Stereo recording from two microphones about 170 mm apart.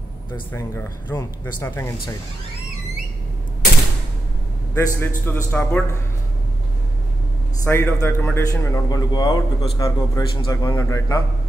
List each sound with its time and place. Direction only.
0.5 s speech: 15° left (ahead or behind)
4.7 s speech: 15° left (ahead or behind)
7.6 s a man's voice: 15° left (ahead or behind)